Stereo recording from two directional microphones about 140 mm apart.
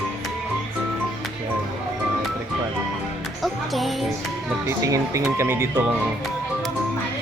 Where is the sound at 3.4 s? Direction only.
Centre (ahead or behind).